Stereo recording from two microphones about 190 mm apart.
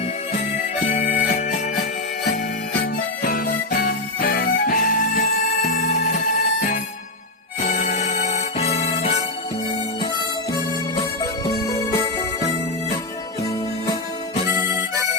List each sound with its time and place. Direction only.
0.9 s music: 35° left (ahead or behind)
3.2 s music: 50° left (ahead or behind); by 9.1 s 35° left (ahead or behind)
11.4 s music: 20° left (ahead or behind)